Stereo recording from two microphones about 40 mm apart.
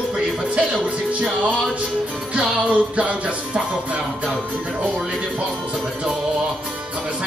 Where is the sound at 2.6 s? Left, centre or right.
Right.